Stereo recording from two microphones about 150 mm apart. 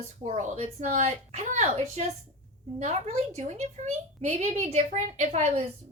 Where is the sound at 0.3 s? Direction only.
50° right (ahead or behind).